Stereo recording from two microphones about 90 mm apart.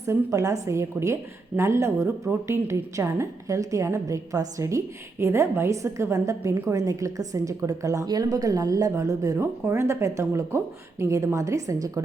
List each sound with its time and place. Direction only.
0.1 s a woman's voice: 35° right (ahead or behind)